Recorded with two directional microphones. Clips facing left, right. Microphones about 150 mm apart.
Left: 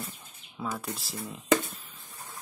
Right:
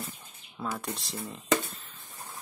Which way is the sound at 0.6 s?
5° left (ahead or behind).